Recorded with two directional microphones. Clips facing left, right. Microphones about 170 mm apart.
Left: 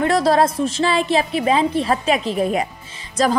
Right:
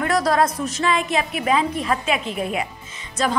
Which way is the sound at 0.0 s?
30° left (ahead or behind).